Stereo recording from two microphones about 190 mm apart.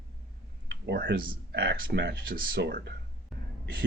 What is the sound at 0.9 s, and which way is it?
Speech, 60° right (ahead or behind).